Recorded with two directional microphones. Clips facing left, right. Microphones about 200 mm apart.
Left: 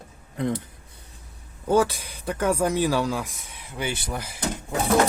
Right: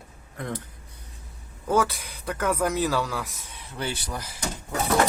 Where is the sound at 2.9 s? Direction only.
15° left (ahead or behind).